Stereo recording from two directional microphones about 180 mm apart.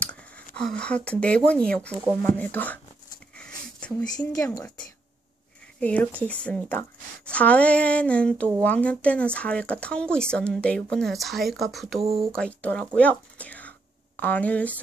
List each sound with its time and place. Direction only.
0.0 s a sound: 5° left (ahead or behind)
0.6 s a woman's voice: 5° left (ahead or behind)
3.3 s a sound: 5° left (ahead or behind)
4.4 s a woman's voice: 15° left (ahead or behind)
5.8 s a woman's voice: 10° left (ahead or behind)
12.0 s speech: 30° right (ahead or behind)
12.3 s a woman's voice: 5° left (ahead or behind)